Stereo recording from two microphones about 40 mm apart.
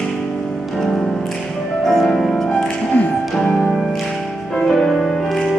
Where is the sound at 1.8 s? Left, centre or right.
Centre.